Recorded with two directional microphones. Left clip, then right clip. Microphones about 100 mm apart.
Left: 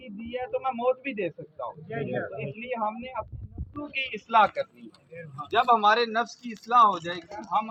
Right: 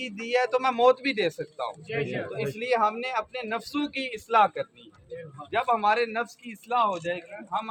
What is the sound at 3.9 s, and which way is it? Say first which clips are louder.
Speech: left 2 dB; 65° right (ahead or behind).